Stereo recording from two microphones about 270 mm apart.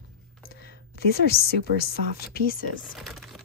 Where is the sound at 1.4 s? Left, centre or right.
Left.